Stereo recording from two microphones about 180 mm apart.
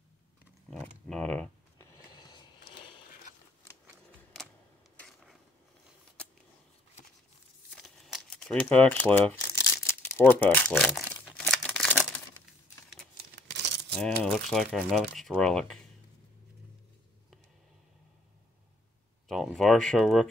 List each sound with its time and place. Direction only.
0.7 s a sound: 5° left (ahead or behind); by 3.0 s 25° left (ahead or behind)
4.9 s dishes: centre (ahead or behind)
7.7 s crumpling: centre (ahead or behind)
10.7 s speech: centre (ahead or behind)
11.3 s crumpling: 5° left (ahead or behind)
13.5 s coin: 75° right (ahead or behind)
13.9 s speech: 5° left (ahead or behind)
19.2 s speech: centre (ahead or behind)